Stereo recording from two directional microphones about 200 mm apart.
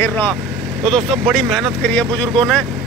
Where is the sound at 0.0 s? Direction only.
10° left (ahead or behind).